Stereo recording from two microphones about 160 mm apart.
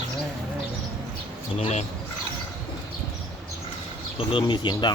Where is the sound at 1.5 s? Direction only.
45° left (ahead or behind).